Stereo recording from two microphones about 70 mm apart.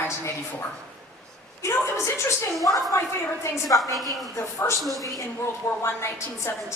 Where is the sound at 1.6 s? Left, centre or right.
Left.